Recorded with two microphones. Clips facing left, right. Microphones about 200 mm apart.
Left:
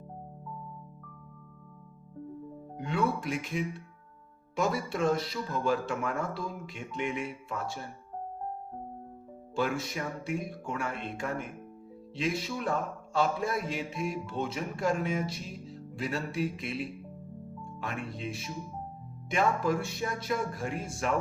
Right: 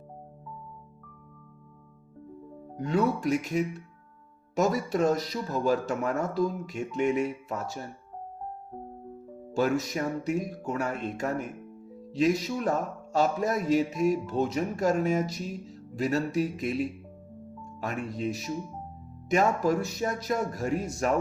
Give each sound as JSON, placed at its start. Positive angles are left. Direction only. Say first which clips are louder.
{"t": 2.7, "sound": "speech", "louder": "right 4 dB", "side_deg": -40}
{"t": 9.6, "sound": "speech", "louder": "right 5 dB", "side_deg": -40}